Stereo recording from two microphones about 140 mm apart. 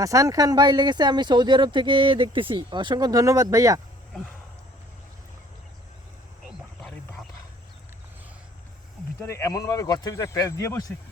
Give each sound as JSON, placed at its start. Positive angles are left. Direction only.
{"t": 0.0, "sound": "speech", "side_deg": -25}
{"t": 9.2, "sound": "speech", "side_deg": 20}